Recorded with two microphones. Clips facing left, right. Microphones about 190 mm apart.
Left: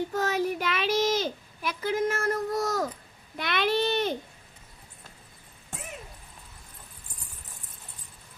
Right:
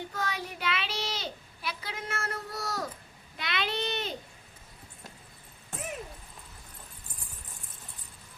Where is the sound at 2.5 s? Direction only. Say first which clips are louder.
Left 8 dB; 50° left (ahead or behind).